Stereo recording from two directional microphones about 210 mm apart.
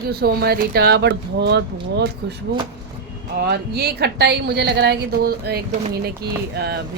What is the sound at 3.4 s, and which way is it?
Speech, 50° right (ahead or behind).